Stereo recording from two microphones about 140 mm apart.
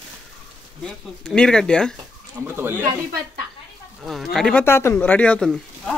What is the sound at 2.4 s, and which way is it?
Speech, 15° right (ahead or behind).